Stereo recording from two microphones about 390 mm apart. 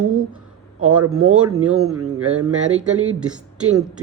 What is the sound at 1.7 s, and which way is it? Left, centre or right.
Speech, centre.